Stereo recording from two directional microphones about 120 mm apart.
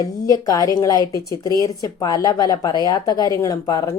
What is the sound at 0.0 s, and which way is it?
A woman's voice, 30° left (ahead or behind).